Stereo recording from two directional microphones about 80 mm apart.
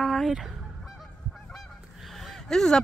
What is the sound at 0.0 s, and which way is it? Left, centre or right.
Goose, centre.